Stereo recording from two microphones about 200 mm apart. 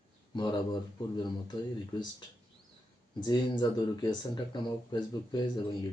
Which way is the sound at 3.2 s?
20° left (ahead or behind).